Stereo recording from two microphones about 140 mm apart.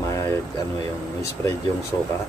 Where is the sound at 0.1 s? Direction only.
20° left (ahead or behind).